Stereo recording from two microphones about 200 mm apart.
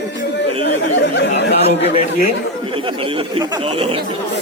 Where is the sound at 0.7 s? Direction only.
60° left (ahead or behind).